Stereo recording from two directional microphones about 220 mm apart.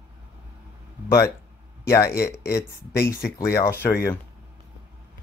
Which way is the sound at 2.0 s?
45° left (ahead or behind).